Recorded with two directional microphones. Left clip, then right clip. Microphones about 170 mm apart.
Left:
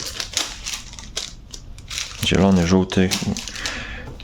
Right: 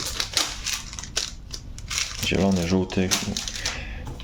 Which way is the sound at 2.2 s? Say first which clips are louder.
Left 7 dB; 35° left (ahead or behind).